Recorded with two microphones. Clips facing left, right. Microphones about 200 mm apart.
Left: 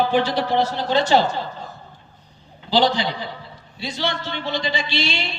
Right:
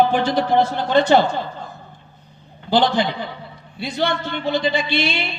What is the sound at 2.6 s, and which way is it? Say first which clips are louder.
A man's voice: right 2 dB; 55° right (ahead or behind).